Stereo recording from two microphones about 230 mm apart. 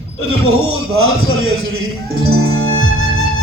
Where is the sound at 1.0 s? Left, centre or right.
Right.